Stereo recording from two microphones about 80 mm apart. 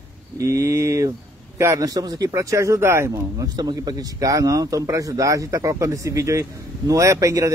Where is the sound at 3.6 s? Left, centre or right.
Right.